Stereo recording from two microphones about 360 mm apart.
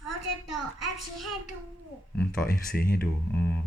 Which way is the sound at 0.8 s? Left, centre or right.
Centre.